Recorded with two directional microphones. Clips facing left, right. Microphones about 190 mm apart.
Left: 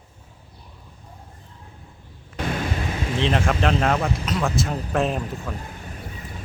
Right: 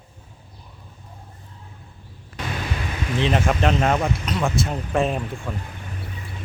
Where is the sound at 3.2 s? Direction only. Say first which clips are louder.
Right 1 dB; centre (ahead or behind).